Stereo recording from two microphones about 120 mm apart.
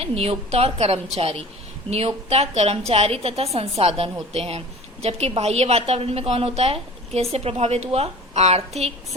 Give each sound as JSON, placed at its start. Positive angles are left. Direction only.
{"t": 0.0, "sound": "speech", "side_deg": -55}